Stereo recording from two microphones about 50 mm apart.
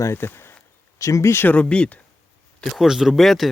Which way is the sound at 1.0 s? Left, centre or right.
Left.